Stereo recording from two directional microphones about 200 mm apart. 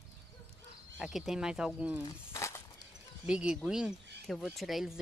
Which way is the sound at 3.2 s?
5° right (ahead or behind).